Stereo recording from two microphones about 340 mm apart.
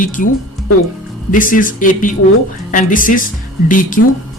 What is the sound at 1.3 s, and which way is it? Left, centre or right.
Speech, left.